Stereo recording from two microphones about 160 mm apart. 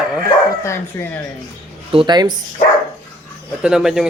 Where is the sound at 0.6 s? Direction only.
15° left (ahead or behind).